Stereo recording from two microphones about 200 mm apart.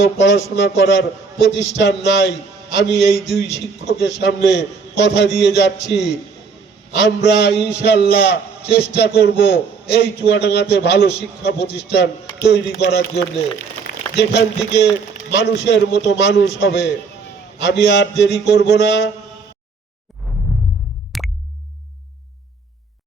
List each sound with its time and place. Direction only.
0.0 s a man's voice: 65° left (ahead or behind)
21.1 s tick: centre (ahead or behind)